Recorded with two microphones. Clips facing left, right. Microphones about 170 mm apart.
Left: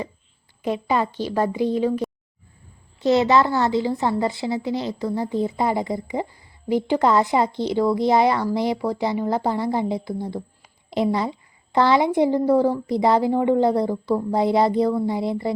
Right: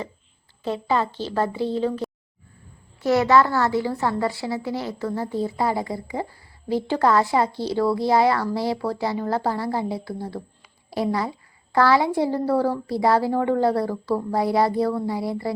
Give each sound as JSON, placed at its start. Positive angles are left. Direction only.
{"t": 0.6, "sound": "a woman's voice", "side_deg": 15}